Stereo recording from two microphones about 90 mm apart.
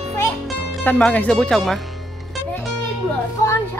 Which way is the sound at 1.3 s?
5° left (ahead or behind).